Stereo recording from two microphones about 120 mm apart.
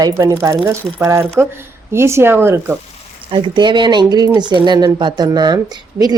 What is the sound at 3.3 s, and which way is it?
Speech, 45° right (ahead or behind).